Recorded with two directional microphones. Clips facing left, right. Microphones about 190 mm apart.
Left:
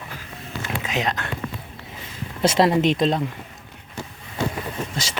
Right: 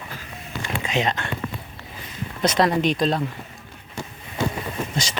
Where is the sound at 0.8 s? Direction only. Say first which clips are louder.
Right 2 dB; centre (ahead or behind).